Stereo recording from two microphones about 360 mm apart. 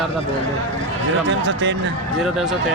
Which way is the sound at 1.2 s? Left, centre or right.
Right.